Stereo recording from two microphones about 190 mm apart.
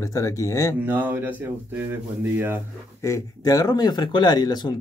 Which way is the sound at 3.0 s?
15° left (ahead or behind).